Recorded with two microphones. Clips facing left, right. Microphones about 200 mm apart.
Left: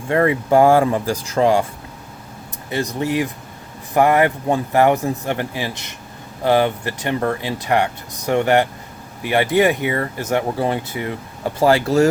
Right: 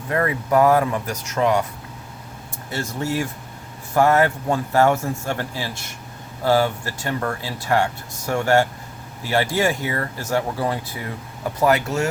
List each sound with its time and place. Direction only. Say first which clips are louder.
0.1 s speech: left 5 dB; 30° left (ahead or behind)
2.6 s speech: left 4 dB; 15° left (ahead or behind)